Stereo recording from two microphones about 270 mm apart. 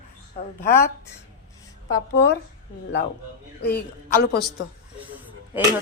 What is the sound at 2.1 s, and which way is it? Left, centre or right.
Speech, left.